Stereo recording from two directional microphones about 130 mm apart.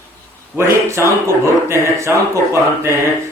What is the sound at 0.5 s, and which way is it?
Speech, 20° right (ahead or behind).